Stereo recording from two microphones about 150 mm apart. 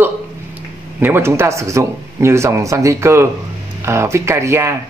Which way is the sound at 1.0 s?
15° right (ahead or behind).